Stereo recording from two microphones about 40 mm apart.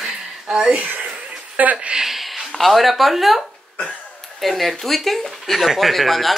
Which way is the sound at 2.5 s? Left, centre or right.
Centre.